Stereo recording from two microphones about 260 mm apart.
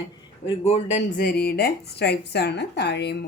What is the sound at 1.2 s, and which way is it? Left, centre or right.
A woman's voice, left.